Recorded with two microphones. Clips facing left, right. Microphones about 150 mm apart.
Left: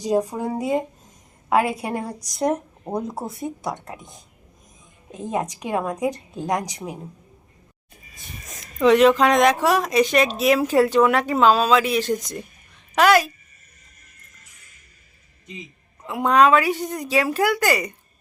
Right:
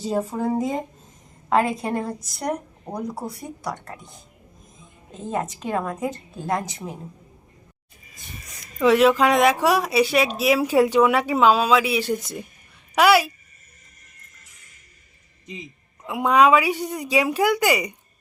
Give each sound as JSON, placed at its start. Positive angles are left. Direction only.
{"t": 0.0, "sound": "a woman's voice", "side_deg": 15}
{"t": 8.6, "sound": "speech", "side_deg": -5}
{"t": 16.0, "sound": "speech", "side_deg": -10}